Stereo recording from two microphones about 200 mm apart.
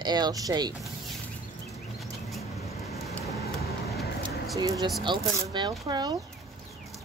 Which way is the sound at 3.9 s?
Centre (ahead or behind).